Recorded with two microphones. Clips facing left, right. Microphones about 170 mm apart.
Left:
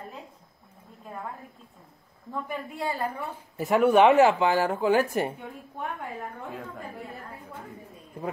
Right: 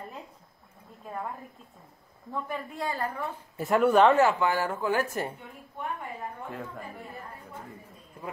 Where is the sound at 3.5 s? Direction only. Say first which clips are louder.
Left 2 dB; centre (ahead or behind).